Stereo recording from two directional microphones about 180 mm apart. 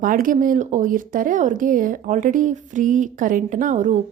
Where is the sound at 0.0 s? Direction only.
50° right (ahead or behind).